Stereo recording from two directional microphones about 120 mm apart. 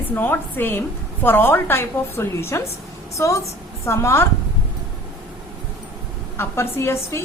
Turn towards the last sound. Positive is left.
turn(degrees=20)  # may be behind; listen again after turning